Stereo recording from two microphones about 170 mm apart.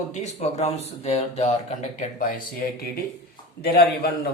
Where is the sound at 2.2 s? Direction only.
55° left (ahead or behind).